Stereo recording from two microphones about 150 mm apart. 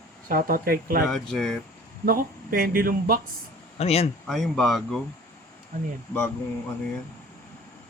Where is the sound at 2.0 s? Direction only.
80° right.